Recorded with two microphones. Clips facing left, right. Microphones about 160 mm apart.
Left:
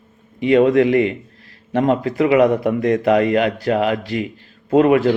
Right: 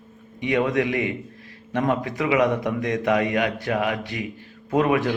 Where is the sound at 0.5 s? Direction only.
30° left (ahead or behind).